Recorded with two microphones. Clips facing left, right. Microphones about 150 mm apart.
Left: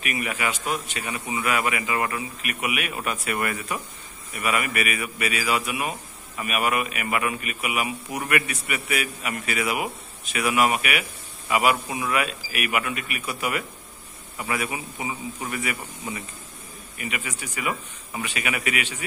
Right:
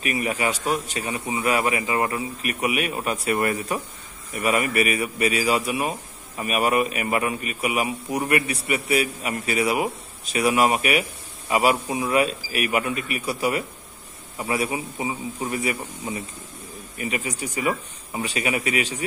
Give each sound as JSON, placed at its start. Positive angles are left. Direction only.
{"t": 0.0, "sound": "a man's voice", "side_deg": -35}